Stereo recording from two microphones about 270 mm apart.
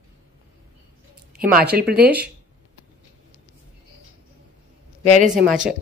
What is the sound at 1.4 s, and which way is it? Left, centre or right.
Child singing, right.